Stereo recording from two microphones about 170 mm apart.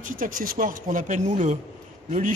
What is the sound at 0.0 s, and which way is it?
A man's voice, 50° right (ahead or behind).